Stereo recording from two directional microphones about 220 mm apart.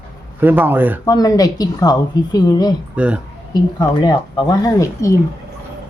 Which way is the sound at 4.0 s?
20° left (ahead or behind).